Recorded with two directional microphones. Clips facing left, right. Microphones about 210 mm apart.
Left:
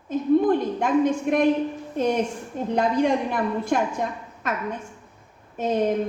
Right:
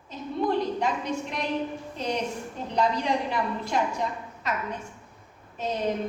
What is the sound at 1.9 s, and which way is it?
A woman's voice, 50° left (ahead or behind).